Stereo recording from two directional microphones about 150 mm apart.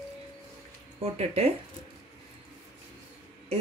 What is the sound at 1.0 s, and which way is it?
Speech, 40° right (ahead or behind).